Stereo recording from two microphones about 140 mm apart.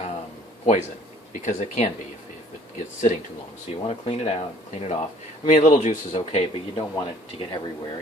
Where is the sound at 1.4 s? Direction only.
60° left (ahead or behind).